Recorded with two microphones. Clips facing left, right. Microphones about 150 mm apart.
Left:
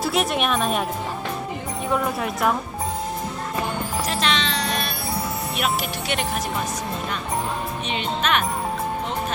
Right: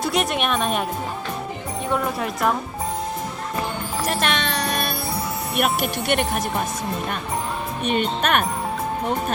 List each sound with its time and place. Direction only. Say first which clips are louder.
0.0 s speech: even; centre (ahead or behind)
1.9 s speech: even; centre (ahead or behind)
4.0 s music: right 2 dB; 55° right (ahead or behind)
5.5 s speech: right 5 dB; 50° right (ahead or behind)
7.9 s speech: right 4 dB; 50° right (ahead or behind)